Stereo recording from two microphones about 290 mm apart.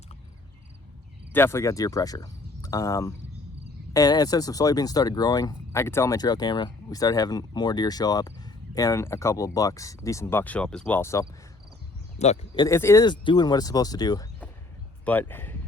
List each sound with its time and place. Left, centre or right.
1.3 s speech: centre
12.2 s speech: left
12.6 s speech: centre